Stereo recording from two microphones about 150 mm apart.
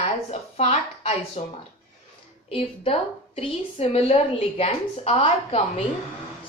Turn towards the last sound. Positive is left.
turn(degrees=40)  # may be behind; listen again after turning